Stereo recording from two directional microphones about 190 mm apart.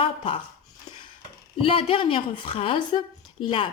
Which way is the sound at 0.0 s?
25° left (ahead or behind).